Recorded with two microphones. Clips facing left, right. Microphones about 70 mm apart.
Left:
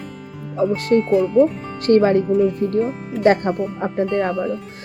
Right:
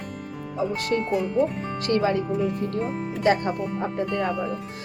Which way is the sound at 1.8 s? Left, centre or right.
Left.